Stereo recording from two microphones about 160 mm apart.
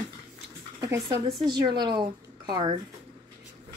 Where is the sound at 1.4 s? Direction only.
25° right (ahead or behind).